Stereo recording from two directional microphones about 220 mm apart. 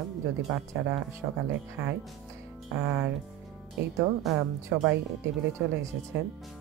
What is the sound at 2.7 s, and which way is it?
Speech, 5° right (ahead or behind).